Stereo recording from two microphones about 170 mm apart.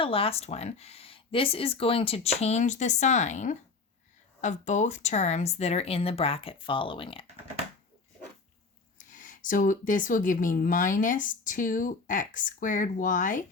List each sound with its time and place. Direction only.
0.0 s speech: 35° left (ahead or behind)
9.0 s speech: 50° left (ahead or behind)